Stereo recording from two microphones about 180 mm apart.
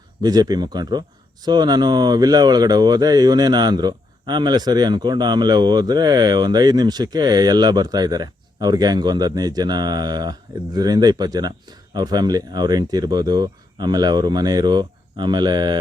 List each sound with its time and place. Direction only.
0.2 s speech: 20° right (ahead or behind)